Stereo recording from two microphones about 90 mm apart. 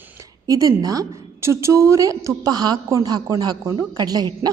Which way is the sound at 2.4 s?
50° right (ahead or behind).